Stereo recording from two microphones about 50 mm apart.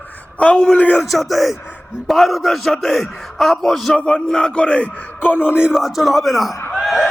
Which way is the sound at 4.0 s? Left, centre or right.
Left.